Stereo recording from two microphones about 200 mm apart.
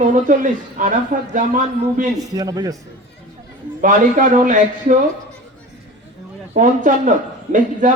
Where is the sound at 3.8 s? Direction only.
40° right (ahead or behind).